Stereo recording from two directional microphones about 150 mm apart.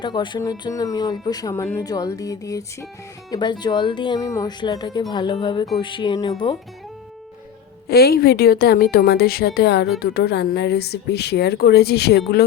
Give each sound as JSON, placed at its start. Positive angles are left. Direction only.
{"t": 0.0, "sound": "speech", "side_deg": 30}
{"t": 7.9, "sound": "a woman's voice", "side_deg": 90}